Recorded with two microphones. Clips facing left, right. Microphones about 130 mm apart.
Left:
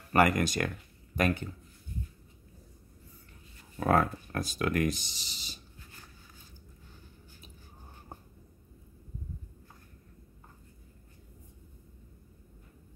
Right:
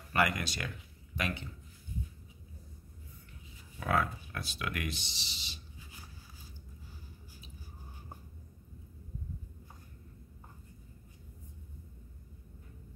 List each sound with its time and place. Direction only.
0.1 s speech: 45° left (ahead or behind)
3.8 s speech: 40° left (ahead or behind)
5.8 s a sound: 10° right (ahead or behind)